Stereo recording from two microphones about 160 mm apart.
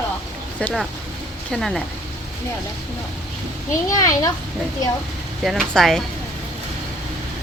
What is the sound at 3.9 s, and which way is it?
Speech, 20° left (ahead or behind).